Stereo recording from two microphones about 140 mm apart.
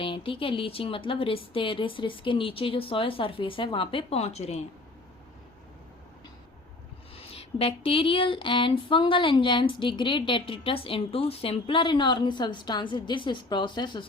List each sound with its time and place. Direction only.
0.0 s speech: 40° left (ahead or behind)
7.2 s speech: 45° left (ahead or behind)